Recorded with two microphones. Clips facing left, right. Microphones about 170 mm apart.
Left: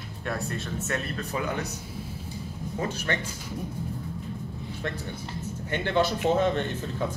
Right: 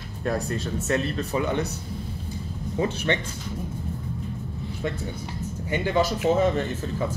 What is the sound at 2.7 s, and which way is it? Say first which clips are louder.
Speech: right 6 dB; 25° right (ahead or behind).